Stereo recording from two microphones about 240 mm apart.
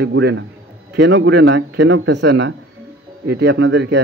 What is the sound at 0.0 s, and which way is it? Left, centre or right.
Speech, right.